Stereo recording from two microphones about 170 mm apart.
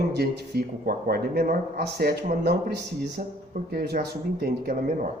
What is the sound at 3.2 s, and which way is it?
Speech, 45° right (ahead or behind).